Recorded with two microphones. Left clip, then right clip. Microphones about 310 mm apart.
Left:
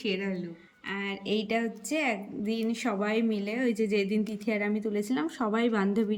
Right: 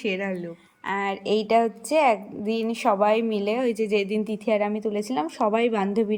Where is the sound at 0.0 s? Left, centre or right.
Centre.